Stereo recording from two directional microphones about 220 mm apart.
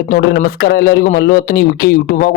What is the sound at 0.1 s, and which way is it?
A man's voice, 40° left (ahead or behind).